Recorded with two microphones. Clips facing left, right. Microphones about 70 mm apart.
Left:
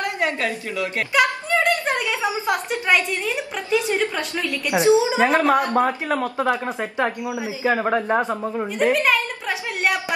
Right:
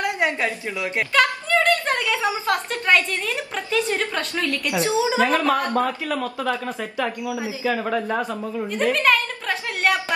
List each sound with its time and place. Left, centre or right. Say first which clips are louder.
0.0 s a woman's voice: right 1 dB; right
1.1 s a woman's voice: even; centre
8.9 s a sound: even; centre